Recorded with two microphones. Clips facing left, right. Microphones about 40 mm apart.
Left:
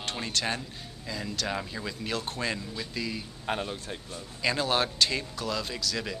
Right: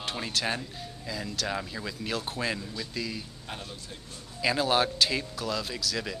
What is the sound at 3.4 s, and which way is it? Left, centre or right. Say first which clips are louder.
Speech: left 8 dB; left.